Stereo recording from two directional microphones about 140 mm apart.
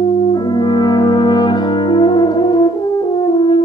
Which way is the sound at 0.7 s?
30° left (ahead or behind).